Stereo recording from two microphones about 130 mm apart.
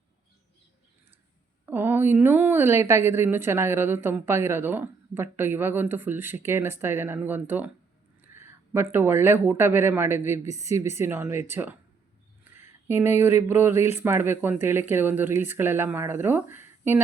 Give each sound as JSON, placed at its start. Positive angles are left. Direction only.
{"t": 1.6, "sound": "a woman's voice", "side_deg": -15}
{"t": 12.9, "sound": "a woman's voice", "side_deg": -20}